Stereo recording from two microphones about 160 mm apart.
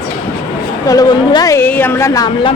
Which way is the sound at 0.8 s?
20° left (ahead or behind).